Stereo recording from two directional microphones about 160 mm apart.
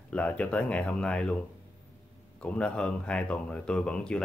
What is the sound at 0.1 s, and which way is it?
Speech, 10° left (ahead or behind).